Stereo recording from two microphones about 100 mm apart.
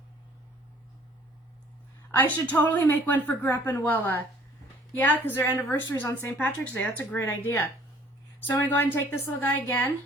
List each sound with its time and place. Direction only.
2.1 s a woman's voice: 20° left (ahead or behind)